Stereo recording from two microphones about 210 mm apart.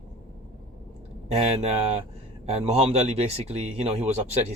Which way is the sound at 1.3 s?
30° right (ahead or behind).